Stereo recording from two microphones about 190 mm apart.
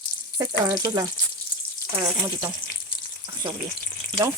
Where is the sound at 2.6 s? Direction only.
25° left (ahead or behind).